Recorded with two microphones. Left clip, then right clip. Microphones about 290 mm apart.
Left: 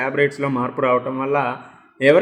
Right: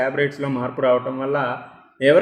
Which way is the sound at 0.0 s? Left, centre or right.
Centre.